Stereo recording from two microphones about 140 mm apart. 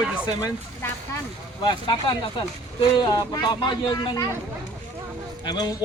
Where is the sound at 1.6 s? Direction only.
35° left (ahead or behind).